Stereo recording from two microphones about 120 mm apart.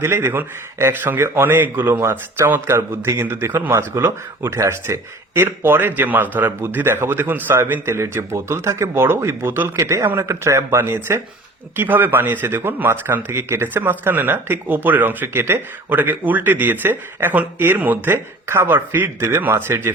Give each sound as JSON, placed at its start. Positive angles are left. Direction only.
{"t": 0.0, "sound": "a man's voice", "side_deg": -20}